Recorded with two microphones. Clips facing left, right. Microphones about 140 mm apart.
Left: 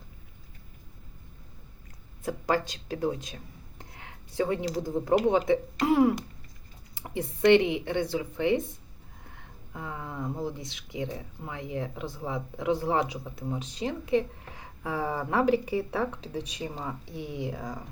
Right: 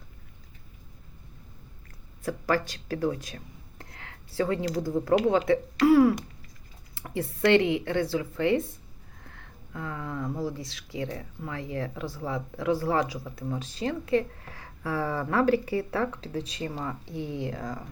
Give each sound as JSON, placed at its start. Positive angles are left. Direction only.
{"t": 2.2, "sound": "speech", "side_deg": 20}